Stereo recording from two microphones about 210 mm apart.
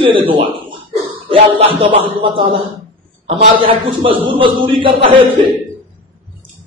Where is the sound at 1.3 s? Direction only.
25° right (ahead or behind).